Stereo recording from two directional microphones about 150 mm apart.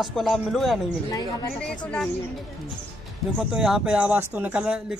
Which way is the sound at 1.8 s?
5° left (ahead or behind).